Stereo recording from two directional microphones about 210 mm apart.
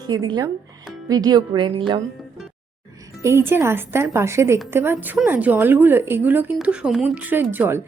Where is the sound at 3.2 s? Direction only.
10° right (ahead or behind).